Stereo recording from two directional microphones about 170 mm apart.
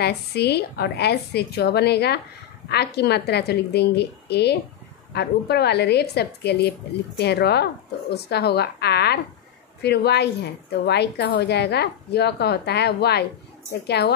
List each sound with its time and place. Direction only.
0.0 s a woman's voice: 70° left (ahead or behind)